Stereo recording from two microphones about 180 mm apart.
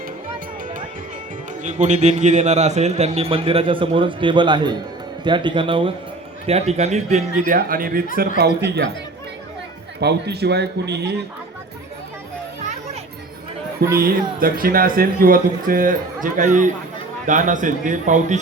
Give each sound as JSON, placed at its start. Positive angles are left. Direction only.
{"t": 1.6, "sound": "a man's voice", "side_deg": -40}
{"t": 8.4, "sound": "speech", "side_deg": -65}
{"t": 10.0, "sound": "a man's voice", "side_deg": -65}
{"t": 13.9, "sound": "speech", "side_deg": -55}